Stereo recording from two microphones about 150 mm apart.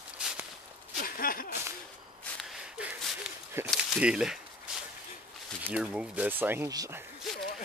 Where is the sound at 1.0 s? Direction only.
75° left (ahead or behind).